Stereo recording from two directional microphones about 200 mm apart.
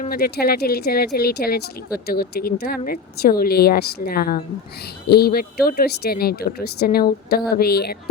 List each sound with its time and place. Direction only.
0.0 s speech: 50° left (ahead or behind)